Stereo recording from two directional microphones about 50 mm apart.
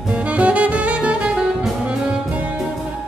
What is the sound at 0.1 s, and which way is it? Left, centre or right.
Saxophone, right.